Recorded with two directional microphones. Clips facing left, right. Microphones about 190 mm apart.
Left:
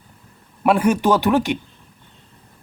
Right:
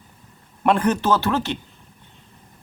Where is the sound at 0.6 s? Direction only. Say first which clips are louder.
Left 3 dB; 10° left (ahead or behind).